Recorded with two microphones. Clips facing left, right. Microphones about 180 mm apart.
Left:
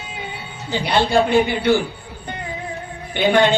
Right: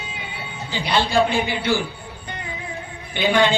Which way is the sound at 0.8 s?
55° left (ahead or behind).